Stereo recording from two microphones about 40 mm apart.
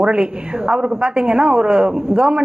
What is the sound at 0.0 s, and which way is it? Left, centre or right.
A man's voice, right.